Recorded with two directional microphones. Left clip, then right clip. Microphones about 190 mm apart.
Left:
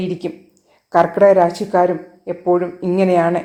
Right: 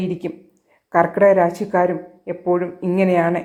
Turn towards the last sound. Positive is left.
turn(degrees=-15)  # may be behind; listen again after turning